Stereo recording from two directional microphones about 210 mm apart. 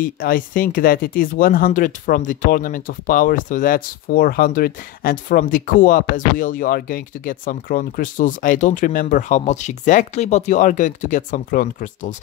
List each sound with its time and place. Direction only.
0.0 s speech: 40° left (ahead or behind)